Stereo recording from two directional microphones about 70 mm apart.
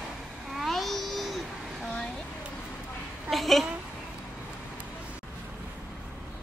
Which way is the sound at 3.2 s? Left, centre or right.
Centre.